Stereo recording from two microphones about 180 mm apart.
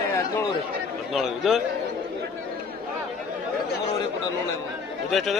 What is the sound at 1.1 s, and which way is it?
Speech, centre (ahead or behind).